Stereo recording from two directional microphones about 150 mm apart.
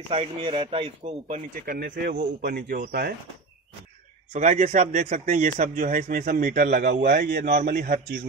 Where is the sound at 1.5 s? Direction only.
80° right.